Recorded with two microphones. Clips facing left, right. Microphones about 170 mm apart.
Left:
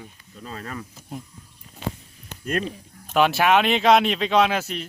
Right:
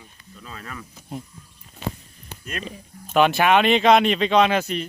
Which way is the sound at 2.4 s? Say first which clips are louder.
Left 7 dB; 45° left (ahead or behind).